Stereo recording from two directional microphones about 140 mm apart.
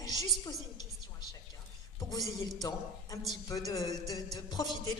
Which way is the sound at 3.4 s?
25° left (ahead or behind).